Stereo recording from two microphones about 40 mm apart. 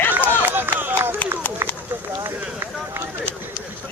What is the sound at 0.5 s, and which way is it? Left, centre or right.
Speech, right.